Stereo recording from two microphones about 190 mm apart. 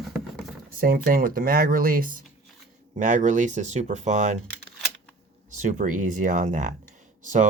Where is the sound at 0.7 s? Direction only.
50° right (ahead or behind).